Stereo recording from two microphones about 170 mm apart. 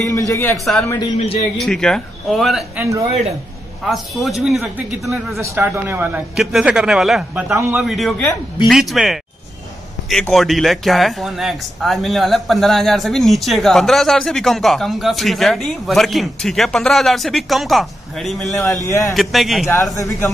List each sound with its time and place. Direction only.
0.3 s a man's voice: 15° left (ahead or behind)
1.1 s a man's voice: 35° left (ahead or behind)
1.6 s speech: 5° left (ahead or behind)
2.8 s speech: 20° right (ahead or behind)
3.8 s speech: centre (ahead or behind)
5.4 s speech: 15° right (ahead or behind)
10.3 s speech: centre (ahead or behind)
18.9 s a man's voice: 20° left (ahead or behind)
19.1 s speech: centre (ahead or behind)
19.7 s a man's voice: 20° left (ahead or behind)